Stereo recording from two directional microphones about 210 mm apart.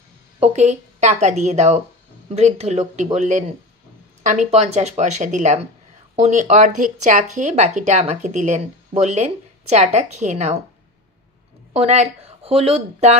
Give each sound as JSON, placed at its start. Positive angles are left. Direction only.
{"t": 0.4, "sound": "a woman's voice", "side_deg": -30}
{"t": 11.7, "sound": "speech", "side_deg": -30}